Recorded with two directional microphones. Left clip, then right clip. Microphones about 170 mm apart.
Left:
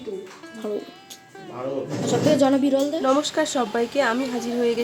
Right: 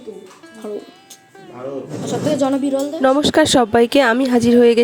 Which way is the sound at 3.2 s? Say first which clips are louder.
Right 10 dB; 55° right (ahead or behind).